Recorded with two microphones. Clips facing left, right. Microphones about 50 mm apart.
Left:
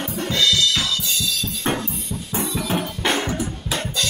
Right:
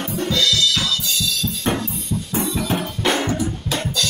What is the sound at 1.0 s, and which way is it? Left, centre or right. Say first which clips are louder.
Music: right 1 dB; left.